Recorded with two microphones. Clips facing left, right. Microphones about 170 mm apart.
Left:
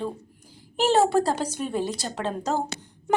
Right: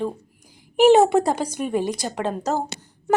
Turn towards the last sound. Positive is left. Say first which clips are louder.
# right 4 dB
turn(degrees=-5)  # may be behind; listen again after turning